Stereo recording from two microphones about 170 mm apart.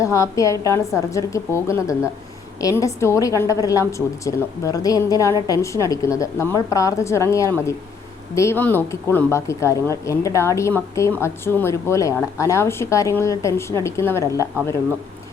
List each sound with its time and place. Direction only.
0.0 s a woman's voice: 20° left (ahead or behind)